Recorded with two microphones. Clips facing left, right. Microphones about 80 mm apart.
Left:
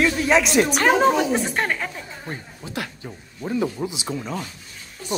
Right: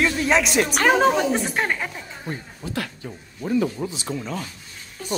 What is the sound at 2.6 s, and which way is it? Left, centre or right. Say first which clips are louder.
Speech: right 2 dB; centre.